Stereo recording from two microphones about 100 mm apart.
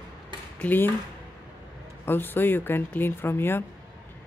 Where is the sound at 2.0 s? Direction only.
20° left (ahead or behind).